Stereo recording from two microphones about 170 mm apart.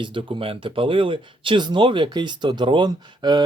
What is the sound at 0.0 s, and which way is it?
Speech, 30° right (ahead or behind).